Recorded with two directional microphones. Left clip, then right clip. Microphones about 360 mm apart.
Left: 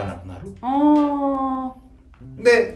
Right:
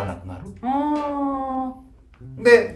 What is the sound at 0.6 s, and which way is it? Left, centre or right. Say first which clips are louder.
Speech: left 5 dB; centre.